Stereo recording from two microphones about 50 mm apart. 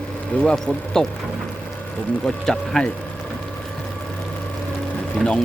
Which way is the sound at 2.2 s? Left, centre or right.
Centre.